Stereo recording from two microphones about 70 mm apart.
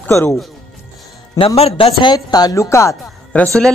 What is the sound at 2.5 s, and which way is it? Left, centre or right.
Speech, left.